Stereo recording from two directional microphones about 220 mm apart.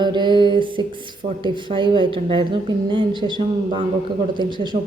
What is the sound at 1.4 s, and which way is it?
A woman's voice, 20° right (ahead or behind).